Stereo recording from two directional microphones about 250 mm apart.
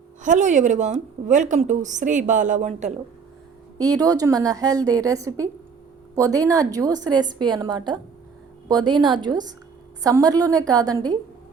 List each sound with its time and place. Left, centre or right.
0.2 s a woman's voice: right
3.8 s a woman's voice: centre